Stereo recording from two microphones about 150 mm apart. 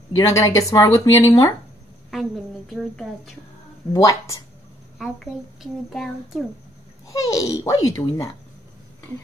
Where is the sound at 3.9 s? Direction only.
20° left (ahead or behind).